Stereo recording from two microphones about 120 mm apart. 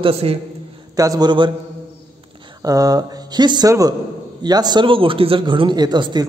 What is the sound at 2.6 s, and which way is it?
Speech, 30° right (ahead or behind).